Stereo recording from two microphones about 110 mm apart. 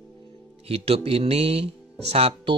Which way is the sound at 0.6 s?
60° right (ahead or behind).